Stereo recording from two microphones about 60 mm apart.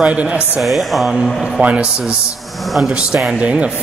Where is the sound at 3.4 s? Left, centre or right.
Right.